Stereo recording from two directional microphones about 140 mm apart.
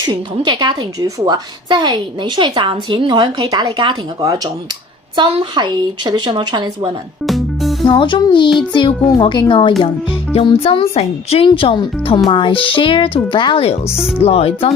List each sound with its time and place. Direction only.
0.0 s a woman's voice: 30° right (ahead or behind)
7.3 s music: centre (ahead or behind)
7.9 s speech: 35° left (ahead or behind)